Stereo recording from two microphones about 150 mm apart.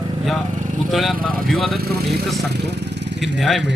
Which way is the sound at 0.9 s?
Centre (ahead or behind).